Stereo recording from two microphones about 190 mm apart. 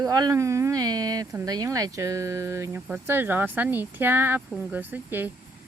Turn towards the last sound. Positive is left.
turn(degrees=-10)  # may be behind; listen again after turning